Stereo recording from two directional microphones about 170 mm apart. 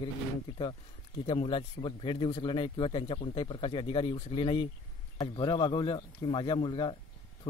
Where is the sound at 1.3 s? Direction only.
30° left (ahead or behind).